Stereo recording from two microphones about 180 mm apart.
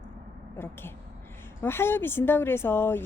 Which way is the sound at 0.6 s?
10° left (ahead or behind).